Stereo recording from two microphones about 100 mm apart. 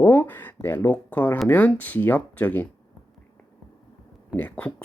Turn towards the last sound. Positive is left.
turn(degrees=15)  # may be behind; listen again after turning